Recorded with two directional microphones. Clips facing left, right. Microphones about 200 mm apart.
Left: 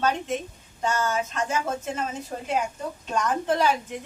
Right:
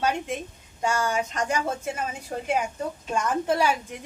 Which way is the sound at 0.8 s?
10° right (ahead or behind).